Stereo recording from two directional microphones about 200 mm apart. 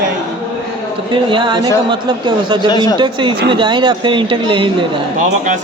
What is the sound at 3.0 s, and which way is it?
Speech, 25° right (ahead or behind).